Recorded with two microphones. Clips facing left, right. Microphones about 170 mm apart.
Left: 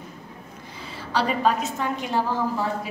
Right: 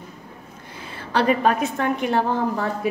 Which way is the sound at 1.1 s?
55° right (ahead or behind).